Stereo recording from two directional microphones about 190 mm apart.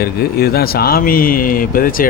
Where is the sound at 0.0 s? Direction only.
55° left (ahead or behind).